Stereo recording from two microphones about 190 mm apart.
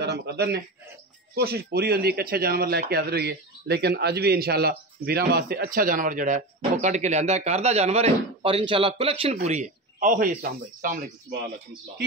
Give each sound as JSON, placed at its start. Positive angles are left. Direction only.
{"t": 0.0, "sound": "a man's voice", "side_deg": -60}